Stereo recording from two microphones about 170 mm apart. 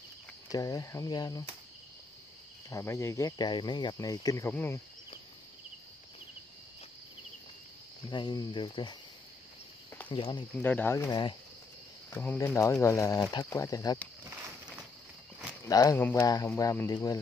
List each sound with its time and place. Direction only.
0.5 s speech: 20° left (ahead or behind)
2.7 s speech: 15° left (ahead or behind)
8.1 s speech: 25° left (ahead or behind)
10.0 s speech: 30° left (ahead or behind)
10.5 s speech: 10° left (ahead or behind)
12.1 s speech: 10° left (ahead or behind)
15.6 s speech: 20° left (ahead or behind)